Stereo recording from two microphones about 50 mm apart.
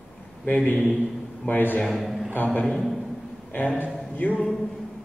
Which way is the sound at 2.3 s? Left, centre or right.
Left.